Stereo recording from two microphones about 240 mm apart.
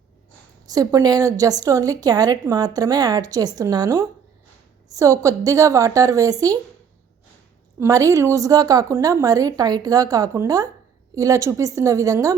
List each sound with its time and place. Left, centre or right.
0.7 s a woman's voice: centre
7.8 s a woman's voice: centre